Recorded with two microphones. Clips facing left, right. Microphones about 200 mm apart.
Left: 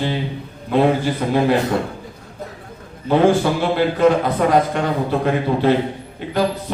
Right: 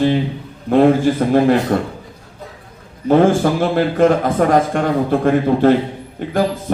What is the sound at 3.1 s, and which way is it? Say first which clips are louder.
A man's voice: right 2 dB; 45° right (ahead or behind).